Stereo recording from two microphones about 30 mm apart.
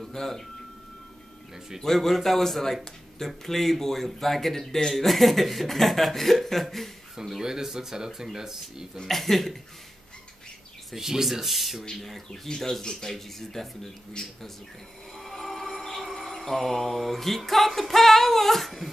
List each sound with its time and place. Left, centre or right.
0.1 s speech: centre
1.8 s speech: centre
7.2 s speech: centre
8.9 s speech: centre
9.2 s speech: centre
11.0 s speech: centre
11.4 s speech: centre
12.3 s speech: centre
13.1 s speech: centre
15.1 s music: centre
16.0 s mantra: centre
17.5 s speech: centre